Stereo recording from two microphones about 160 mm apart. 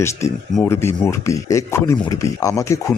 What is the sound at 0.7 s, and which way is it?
Speech, 15° left (ahead or behind).